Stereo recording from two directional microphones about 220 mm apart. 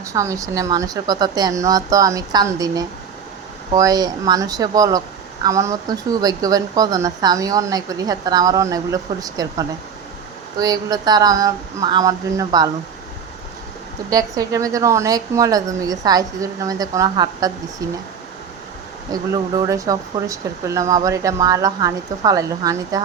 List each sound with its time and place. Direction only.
0.0 s speech: 15° right (ahead or behind)
14.1 s speech: 15° right (ahead or behind)
19.1 s speech: 15° right (ahead or behind)